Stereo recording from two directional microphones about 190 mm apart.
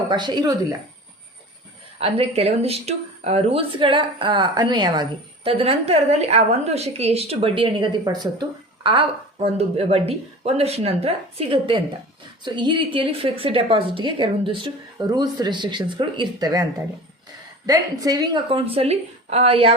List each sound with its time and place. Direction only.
0.1 s a woman's voice: 20° right (ahead or behind)
2.0 s a woman's voice: 30° right (ahead or behind)
17.7 s a woman's voice: 20° right (ahead or behind)